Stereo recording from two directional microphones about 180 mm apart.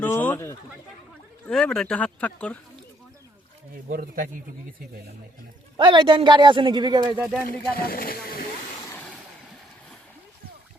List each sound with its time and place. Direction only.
0.0 s speech: 10° left (ahead or behind)
3.8 s a man's voice: 50° right (ahead or behind)
5.7 s a man's voice: 25° right (ahead or behind)
7.4 s speech: 55° left (ahead or behind)
8.9 s vehicle: 10° left (ahead or behind)